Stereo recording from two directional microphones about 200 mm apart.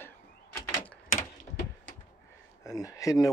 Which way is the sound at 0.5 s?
10° left (ahead or behind).